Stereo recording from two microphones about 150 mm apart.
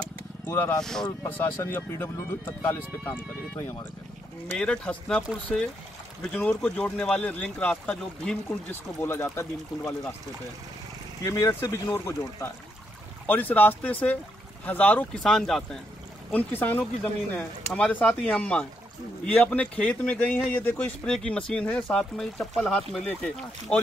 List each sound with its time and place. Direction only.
0.5 s a man's voice: 20° left (ahead or behind)
4.6 s a man's voice: 5° left (ahead or behind)
11.2 s a man's voice: 20° left (ahead or behind)